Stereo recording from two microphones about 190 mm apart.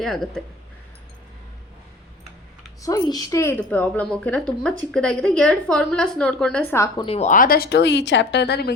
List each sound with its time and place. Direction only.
0.0 s a woman's voice: centre (ahead or behind)
2.8 s a woman's voice: 20° left (ahead or behind)
7.0 s speech: 35° left (ahead or behind); by 8.7 s 60° left (ahead or behind)